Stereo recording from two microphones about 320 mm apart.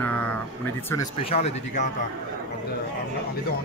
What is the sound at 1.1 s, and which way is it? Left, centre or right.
Speech, centre.